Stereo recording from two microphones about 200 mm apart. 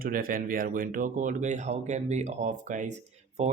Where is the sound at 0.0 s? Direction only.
45° right (ahead or behind).